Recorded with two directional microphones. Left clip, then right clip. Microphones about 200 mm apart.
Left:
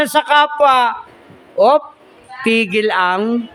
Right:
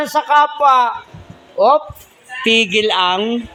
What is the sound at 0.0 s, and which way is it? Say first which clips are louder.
A man's voice: left 1 dB; 25° left (ahead or behind).